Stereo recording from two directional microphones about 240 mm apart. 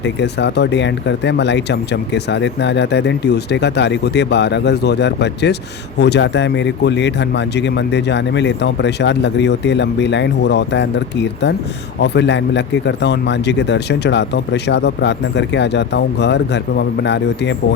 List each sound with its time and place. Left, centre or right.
0.0 s speech: left